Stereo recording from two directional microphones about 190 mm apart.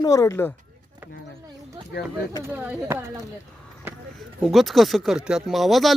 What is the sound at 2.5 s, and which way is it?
Speech, 10° right (ahead or behind).